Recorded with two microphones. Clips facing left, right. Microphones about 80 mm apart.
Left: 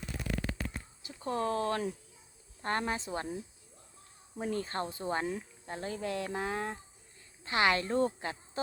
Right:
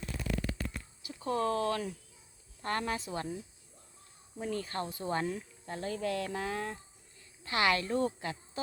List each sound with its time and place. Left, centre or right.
1.0 s speech: left